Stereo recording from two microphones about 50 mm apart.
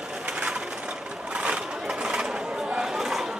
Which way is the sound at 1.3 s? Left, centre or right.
Centre.